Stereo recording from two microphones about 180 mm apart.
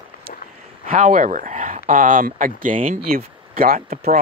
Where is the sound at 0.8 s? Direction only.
45° right (ahead or behind).